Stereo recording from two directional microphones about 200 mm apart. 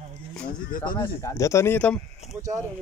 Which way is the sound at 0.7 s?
45° left (ahead or behind).